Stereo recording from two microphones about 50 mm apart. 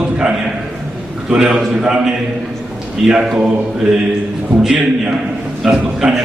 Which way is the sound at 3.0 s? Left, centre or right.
Centre.